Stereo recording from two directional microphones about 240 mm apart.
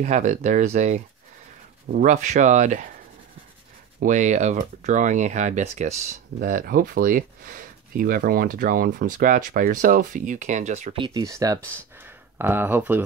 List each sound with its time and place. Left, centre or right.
0.0 s speech: right
4.0 s speech: right; by 13.0 s centre